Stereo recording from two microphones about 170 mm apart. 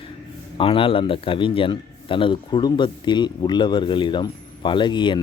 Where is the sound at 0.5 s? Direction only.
30° left (ahead or behind).